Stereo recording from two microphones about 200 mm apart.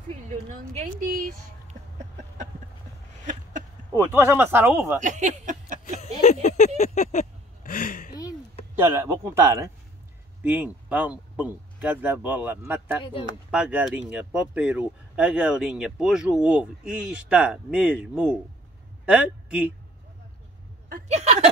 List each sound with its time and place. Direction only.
0.1 s speech: 40° right (ahead or behind)
4.1 s speech: 10° right (ahead or behind)
5.0 s a sound: 35° right (ahead or behind)
6.4 s a sound: 35° left (ahead or behind)
8.1 s a sound: 20° left (ahead or behind)
8.7 s speech: 10° right (ahead or behind)
13.0 s speech: 25° left (ahead or behind)
13.5 s speech: 5° right (ahead or behind)
20.9 s speech: 35° right (ahead or behind)